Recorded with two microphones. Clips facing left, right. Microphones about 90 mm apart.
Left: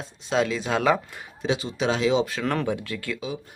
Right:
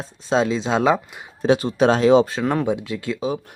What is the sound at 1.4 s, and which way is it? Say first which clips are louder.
Speech: right 9 dB; 50° right (ahead or behind).